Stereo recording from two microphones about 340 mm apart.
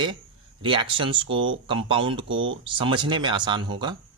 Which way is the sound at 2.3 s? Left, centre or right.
Right.